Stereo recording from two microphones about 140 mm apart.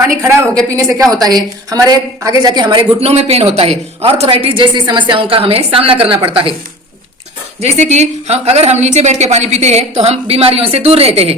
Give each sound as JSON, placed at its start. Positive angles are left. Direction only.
{"t": 0.0, "sound": "a woman's voice", "side_deg": -20}
{"t": 3.1, "sound": "a woman's voice", "side_deg": -45}
{"t": 7.6, "sound": "a woman's voice", "side_deg": -55}